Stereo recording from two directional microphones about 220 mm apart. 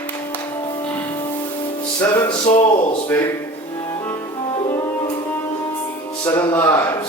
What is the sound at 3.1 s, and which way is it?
Speech, 5° left (ahead or behind).